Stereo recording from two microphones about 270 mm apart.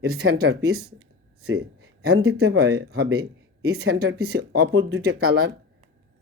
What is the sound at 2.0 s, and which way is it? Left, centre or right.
Speech, right.